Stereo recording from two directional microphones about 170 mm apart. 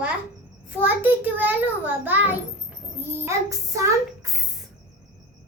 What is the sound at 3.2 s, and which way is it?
Child singing, 20° right (ahead or behind).